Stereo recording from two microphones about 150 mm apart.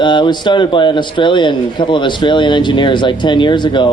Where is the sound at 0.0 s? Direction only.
30° left (ahead or behind).